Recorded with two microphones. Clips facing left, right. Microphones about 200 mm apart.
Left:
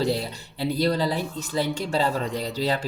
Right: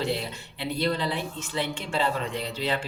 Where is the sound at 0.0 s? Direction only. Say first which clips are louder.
Left 4 dB; 35° left (ahead or behind).